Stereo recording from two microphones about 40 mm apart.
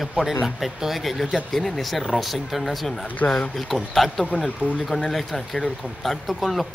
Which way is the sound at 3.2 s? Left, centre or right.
Left.